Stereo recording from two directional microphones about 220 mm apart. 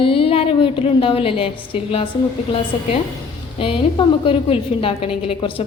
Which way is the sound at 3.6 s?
25° left (ahead or behind).